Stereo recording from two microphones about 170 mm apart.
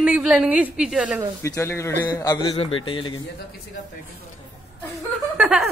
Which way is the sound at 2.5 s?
30° left (ahead or behind).